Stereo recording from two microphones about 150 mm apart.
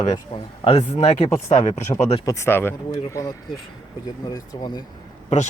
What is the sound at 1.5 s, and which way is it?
Speech, 50° left (ahead or behind).